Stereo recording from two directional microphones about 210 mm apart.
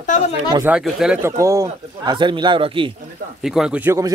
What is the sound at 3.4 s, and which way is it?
Speech, 5° right (ahead or behind).